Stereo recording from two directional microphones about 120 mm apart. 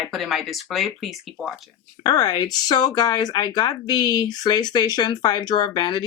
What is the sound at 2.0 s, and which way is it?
Speech, 35° left (ahead or behind).